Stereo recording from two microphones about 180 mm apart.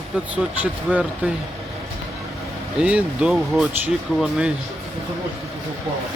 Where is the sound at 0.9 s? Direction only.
10° right (ahead or behind).